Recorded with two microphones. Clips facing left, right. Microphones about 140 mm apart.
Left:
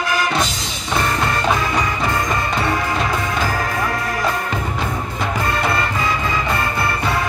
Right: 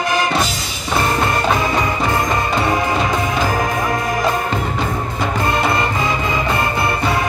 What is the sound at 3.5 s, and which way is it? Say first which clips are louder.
Music: right 3 dB; 15° right (ahead or behind).